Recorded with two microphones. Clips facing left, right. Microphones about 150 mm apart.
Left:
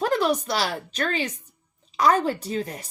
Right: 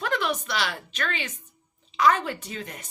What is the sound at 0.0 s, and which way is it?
Speech, 40° left (ahead or behind).